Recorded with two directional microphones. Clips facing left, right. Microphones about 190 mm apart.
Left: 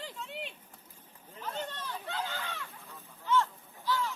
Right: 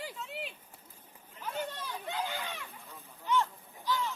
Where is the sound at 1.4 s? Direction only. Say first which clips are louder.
Right 1 dB; 10° right (ahead or behind).